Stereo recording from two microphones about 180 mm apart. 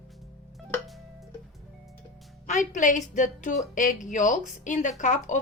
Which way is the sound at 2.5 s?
45° left (ahead or behind).